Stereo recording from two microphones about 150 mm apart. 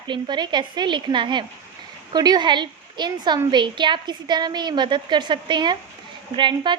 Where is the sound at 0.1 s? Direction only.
30° right (ahead or behind).